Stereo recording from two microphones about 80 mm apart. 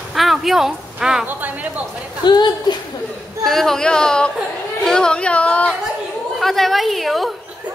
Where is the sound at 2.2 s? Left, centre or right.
Left.